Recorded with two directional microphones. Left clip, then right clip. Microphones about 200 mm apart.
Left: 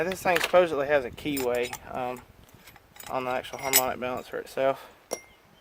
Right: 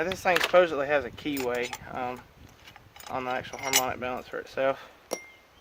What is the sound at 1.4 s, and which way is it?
Keys jangling, 30° left (ahead or behind).